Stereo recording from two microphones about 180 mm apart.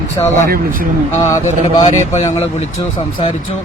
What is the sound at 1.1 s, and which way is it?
Speech, 15° left (ahead or behind).